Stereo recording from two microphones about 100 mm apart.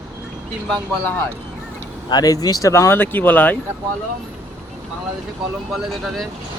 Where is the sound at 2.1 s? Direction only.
40° left (ahead or behind); by 3.6 s 15° left (ahead or behind).